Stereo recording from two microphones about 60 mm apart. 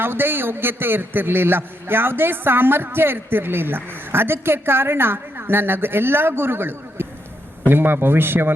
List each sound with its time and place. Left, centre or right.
0.0 s a man's voice: right